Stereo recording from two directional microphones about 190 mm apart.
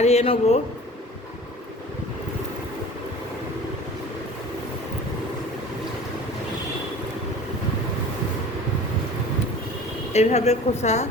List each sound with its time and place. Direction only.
0.0 s a woman's voice: 35° left (ahead or behind)
10.1 s a woman's voice: 35° left (ahead or behind)